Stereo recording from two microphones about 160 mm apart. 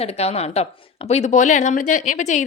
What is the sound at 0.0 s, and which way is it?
A woman's voice, 40° left (ahead or behind).